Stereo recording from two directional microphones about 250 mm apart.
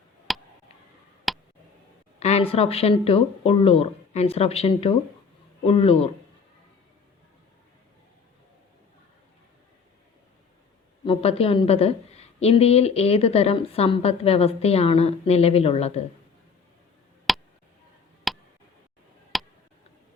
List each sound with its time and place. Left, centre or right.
0.3 s a sound: centre
1.3 s tick: centre
2.1 s a woman's voice: left
11.0 s a woman's voice: left
17.3 s tick: centre